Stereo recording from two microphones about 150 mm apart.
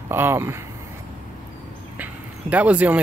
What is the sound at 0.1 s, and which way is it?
Speech, 15° right (ahead or behind).